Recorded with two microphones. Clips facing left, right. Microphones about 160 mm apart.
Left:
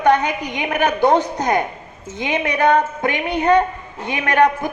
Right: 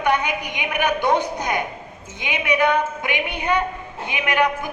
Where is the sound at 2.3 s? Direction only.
45° left (ahead or behind).